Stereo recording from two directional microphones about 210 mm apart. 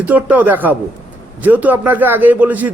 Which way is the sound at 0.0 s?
5° right (ahead or behind).